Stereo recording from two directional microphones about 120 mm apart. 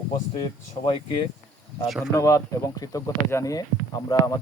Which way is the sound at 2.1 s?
25° left (ahead or behind).